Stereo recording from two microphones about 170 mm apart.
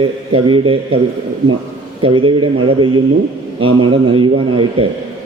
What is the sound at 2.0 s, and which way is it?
A man's voice, 30° right (ahead or behind).